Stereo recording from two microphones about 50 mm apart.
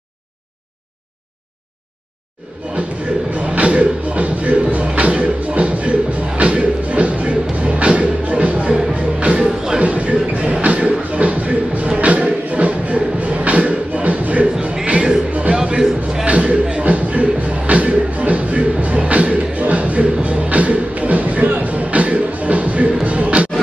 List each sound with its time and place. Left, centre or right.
2.8 s a sound: right
3.3 s music: right
9.4 s music: centre
9.8 s a sound: right
12.0 s music: right
16.3 s music: right